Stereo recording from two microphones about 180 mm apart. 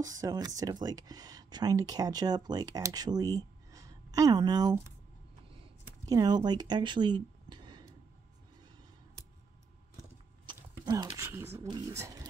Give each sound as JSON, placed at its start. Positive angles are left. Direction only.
{"t": 0.0, "sound": "speech", "side_deg": -20}
{"t": 6.0, "sound": "speech", "side_deg": -20}
{"t": 10.4, "sound": "speech", "side_deg": -25}